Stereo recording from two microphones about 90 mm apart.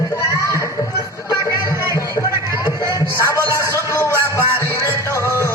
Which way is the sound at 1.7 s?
30° right (ahead or behind).